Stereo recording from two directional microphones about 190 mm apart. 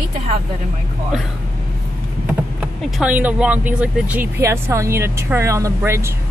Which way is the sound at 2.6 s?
5° right (ahead or behind).